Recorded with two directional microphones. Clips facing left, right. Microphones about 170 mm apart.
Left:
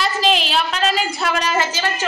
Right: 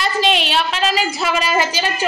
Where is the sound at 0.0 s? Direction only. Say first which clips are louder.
Right 1 dB; centre (ahead or behind).